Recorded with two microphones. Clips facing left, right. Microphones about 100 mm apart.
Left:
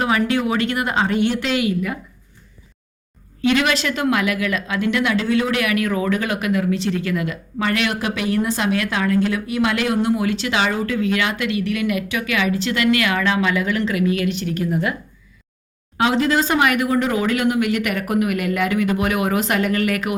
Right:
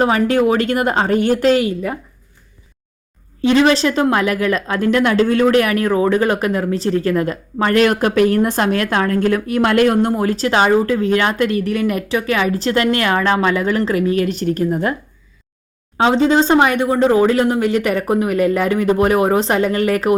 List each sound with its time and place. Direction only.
0.0 s a woman's voice: 40° right (ahead or behind)
3.4 s a woman's voice: 30° right (ahead or behind)
16.0 s a woman's voice: 30° right (ahead or behind)